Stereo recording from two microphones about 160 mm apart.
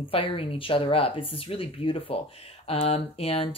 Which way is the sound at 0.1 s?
35° left (ahead or behind).